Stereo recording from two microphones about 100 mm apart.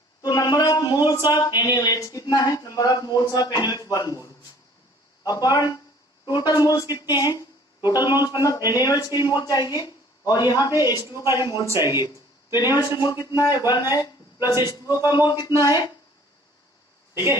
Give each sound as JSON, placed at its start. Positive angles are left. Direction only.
{"t": 0.2, "sound": "speech", "side_deg": 40}
{"t": 11.1, "sound": "speech", "side_deg": -25}
{"t": 11.3, "sound": "speech", "side_deg": 40}
{"t": 11.6, "sound": "speech", "side_deg": -30}
{"t": 12.5, "sound": "speech", "side_deg": 40}
{"t": 15.3, "sound": "speech", "side_deg": 45}